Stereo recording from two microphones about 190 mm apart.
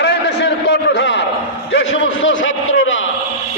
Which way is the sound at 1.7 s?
85° left.